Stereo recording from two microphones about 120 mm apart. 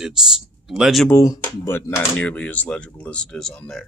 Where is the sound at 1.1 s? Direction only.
25° left (ahead or behind).